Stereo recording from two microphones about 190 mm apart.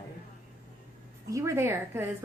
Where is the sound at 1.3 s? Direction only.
15° right (ahead or behind).